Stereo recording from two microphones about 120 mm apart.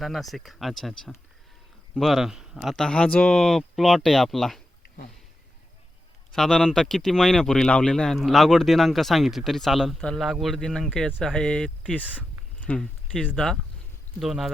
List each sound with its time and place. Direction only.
0.0 s speech: centre (ahead or behind)
6.3 s speech: 5° left (ahead or behind)
12.0 s a sound: 10° right (ahead or behind)
12.5 s speech: 10° left (ahead or behind)